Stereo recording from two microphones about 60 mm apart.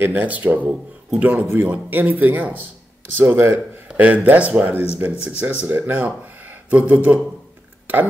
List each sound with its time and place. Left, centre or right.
0.0 s speech: right
3.2 s speech: right
3.9 s speech: right
7.8 s a sound: right